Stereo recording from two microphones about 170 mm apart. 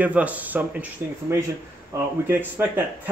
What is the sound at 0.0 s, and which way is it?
Speech, 10° right (ahead or behind).